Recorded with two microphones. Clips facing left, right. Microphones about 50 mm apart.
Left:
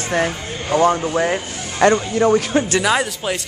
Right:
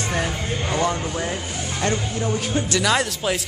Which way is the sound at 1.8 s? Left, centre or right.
Left.